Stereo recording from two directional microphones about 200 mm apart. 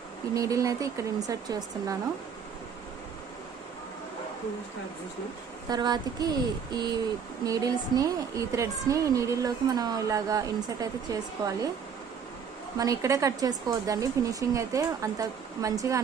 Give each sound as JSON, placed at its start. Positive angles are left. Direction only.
{"t": 0.3, "sound": "a woman's voice", "side_deg": -15}
{"t": 5.6, "sound": "a sound", "side_deg": -20}
{"t": 7.4, "sound": "a woman's voice", "side_deg": -20}
{"t": 12.7, "sound": "a woman's voice", "side_deg": -15}